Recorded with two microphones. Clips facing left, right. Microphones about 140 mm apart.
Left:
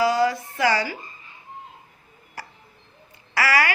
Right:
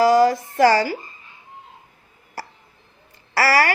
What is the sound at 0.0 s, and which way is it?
Speech, 40° right (ahead or behind).